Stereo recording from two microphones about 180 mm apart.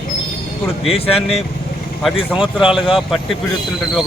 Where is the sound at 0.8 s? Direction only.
35° left (ahead or behind).